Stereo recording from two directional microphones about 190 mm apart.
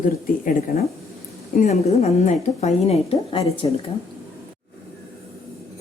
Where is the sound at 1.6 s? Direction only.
35° left (ahead or behind).